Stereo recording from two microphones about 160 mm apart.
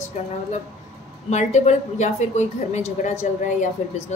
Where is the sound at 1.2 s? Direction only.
45° left (ahead or behind).